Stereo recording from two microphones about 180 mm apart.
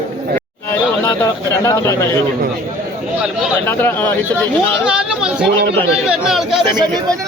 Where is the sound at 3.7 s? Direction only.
10° left (ahead or behind).